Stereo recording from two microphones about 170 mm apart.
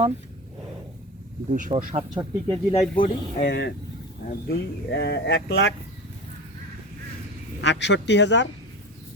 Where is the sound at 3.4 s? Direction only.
90° left.